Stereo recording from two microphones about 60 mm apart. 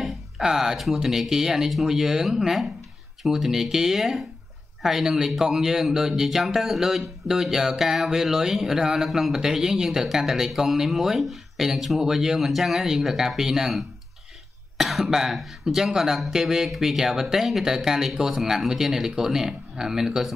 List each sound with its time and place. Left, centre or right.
0.0 s music: centre
0.9 s speech: centre